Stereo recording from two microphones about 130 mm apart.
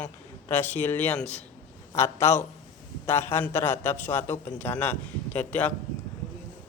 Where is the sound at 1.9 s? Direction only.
20° left (ahead or behind).